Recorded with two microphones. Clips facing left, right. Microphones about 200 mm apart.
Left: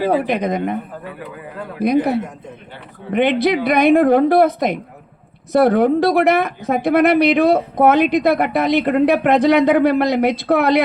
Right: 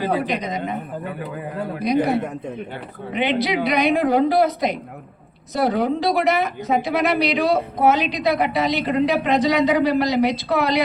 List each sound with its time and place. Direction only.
0.0 s speech: 55° left (ahead or behind)
3.1 s a woman's voice: 55° left (ahead or behind)